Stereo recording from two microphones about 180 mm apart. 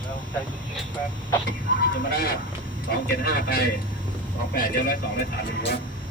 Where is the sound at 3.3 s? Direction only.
60° left (ahead or behind).